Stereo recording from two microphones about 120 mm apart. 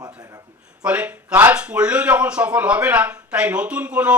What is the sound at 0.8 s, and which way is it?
Speech, 10° right (ahead or behind).